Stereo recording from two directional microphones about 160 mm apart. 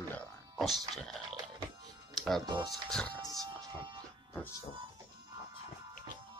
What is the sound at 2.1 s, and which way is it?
Music, centre (ahead or behind).